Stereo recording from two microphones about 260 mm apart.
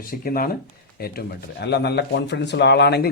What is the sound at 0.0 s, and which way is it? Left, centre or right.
Speech, left.